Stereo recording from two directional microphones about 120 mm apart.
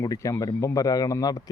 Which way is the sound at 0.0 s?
25° left (ahead or behind).